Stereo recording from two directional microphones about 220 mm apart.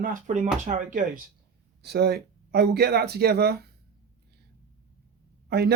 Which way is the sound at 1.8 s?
45° right (ahead or behind).